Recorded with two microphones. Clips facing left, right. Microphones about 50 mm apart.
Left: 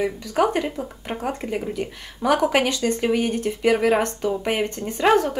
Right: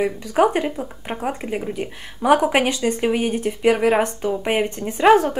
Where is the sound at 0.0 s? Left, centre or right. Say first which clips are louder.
Right 3 dB; right.